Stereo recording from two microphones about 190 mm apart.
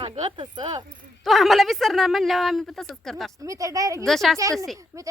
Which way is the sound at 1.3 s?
Centre (ahead or behind).